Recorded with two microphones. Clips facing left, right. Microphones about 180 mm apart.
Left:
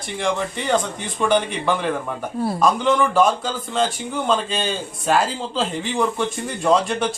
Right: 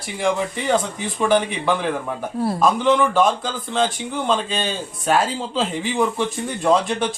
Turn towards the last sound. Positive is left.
turn(degrees=0)  # may be behind; listen again after turning